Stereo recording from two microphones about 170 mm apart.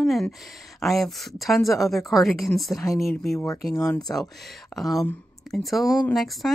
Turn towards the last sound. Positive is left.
turn(degrees=0)  # may be behind; listen again after turning